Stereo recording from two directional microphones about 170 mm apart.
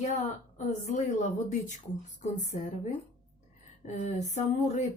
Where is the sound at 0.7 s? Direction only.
45° left (ahead or behind).